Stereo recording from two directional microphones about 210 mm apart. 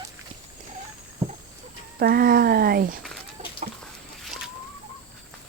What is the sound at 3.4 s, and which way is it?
Chicken, 30° right (ahead or behind).